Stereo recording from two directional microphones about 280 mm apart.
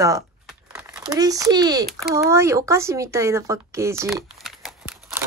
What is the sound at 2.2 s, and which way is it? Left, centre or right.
Speech, centre.